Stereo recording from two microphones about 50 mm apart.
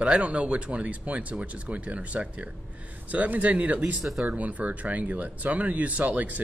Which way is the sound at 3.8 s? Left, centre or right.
Centre.